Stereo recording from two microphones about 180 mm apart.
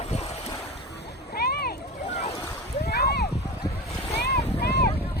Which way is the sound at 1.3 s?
60° left (ahead or behind).